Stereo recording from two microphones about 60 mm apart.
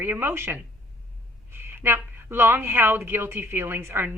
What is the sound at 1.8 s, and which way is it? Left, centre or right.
Speech, right.